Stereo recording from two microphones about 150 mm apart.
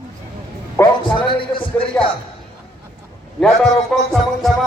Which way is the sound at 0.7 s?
30° left (ahead or behind).